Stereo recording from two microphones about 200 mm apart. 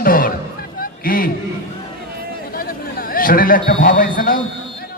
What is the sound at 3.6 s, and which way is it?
Speech, 45° left (ahead or behind).